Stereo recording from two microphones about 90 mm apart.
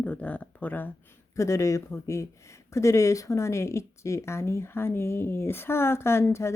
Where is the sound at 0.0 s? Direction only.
15° left (ahead or behind).